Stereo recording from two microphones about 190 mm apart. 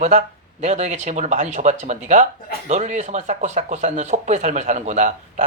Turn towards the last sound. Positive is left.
turn(degrees=-40)  # may be behind; listen again after turning